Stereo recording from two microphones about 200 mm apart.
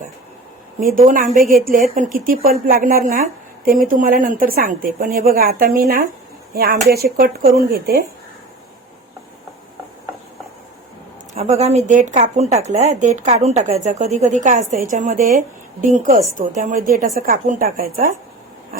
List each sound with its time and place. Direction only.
0.9 s a woman's voice: 40° right (ahead or behind)
11.3 s a woman's voice: 35° right (ahead or behind)